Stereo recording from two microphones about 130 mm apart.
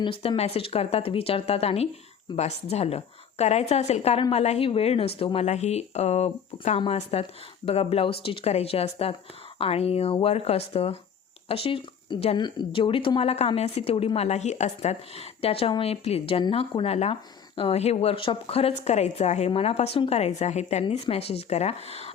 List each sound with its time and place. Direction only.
0.0 s a woman's voice: 45° left (ahead or behind); by 19.5 s 60° left (ahead or behind)
19.5 s a woman's voice: 50° left (ahead or behind)
20.8 s speech: 50° left (ahead or behind)